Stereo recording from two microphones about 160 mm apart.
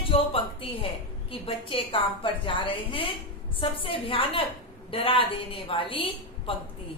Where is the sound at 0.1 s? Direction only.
35° left (ahead or behind).